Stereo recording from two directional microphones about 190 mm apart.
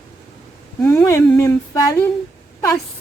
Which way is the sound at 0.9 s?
15° left (ahead or behind).